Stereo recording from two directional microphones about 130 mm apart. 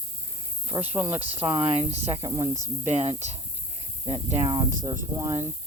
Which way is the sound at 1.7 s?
55° right (ahead or behind).